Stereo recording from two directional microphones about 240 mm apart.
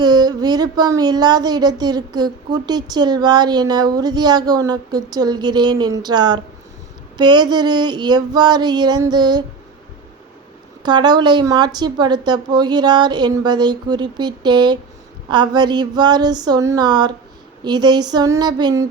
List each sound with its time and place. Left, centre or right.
0.0 s speech: centre
10.8 s speech: centre